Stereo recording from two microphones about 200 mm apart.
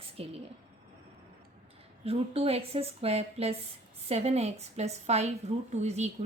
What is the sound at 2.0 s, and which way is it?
A woman's voice, 30° right (ahead or behind).